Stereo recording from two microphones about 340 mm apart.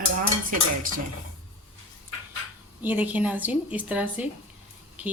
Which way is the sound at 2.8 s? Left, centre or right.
Centre.